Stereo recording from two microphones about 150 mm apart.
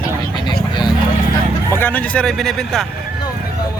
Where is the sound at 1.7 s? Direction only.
10° left (ahead or behind).